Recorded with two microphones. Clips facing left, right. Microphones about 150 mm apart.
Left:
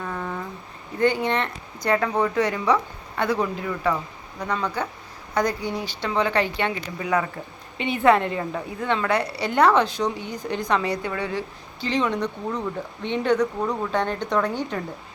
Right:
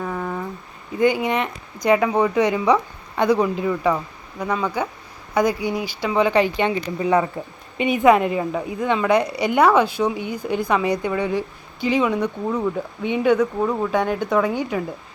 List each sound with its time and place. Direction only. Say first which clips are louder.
0.0 s a sound: right 4 dB; 10° right (ahead or behind)
0.9 s a woman's voice: right 3 dB; 10° right (ahead or behind); by 7.3 s 25° right (ahead or behind)
7.8 s a woman's voice: right 3 dB; 15° right (ahead or behind)